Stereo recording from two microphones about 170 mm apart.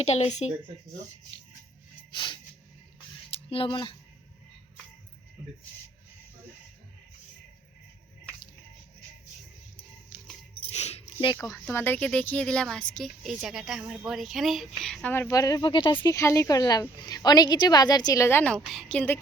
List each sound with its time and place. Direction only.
0.0 s a woman's voice: 40° left (ahead or behind)
2.1 s a sound: 25° left (ahead or behind)
10.5 s a sound: 40° left (ahead or behind)
11.3 s a woman's voice: 10° left (ahead or behind)
15.1 s a woman's voice: 15° left (ahead or behind)
16.1 s a woman's voice: 15° left (ahead or behind)